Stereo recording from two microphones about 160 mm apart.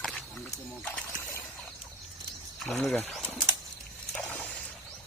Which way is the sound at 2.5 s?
5° left (ahead or behind).